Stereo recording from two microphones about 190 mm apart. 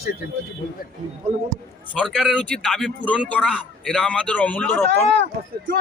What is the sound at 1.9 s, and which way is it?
Speech, 5° left (ahead or behind).